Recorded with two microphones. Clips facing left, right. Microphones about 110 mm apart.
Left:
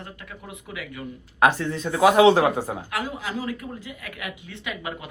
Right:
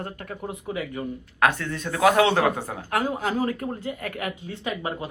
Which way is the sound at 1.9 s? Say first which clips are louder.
Left 2 dB; 15° left (ahead or behind).